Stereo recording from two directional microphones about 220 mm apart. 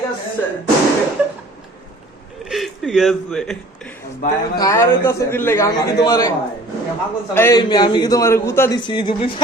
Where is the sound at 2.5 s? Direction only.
Centre (ahead or behind).